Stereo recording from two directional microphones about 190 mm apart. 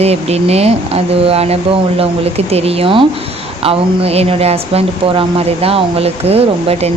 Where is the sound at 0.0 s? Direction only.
35° right (ahead or behind).